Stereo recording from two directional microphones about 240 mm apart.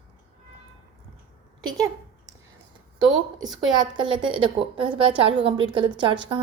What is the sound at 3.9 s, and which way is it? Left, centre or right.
A woman's voice, centre.